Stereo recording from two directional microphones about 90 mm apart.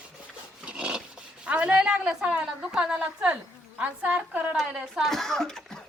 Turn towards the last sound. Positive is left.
turn(degrees=5)  # may be behind; listen again after turning